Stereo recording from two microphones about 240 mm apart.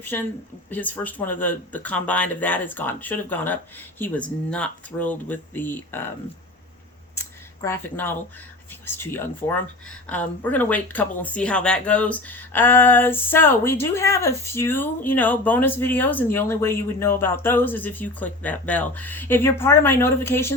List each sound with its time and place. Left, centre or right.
0.1 s speech: centre
7.2 s a sound: centre
9.0 s speech: centre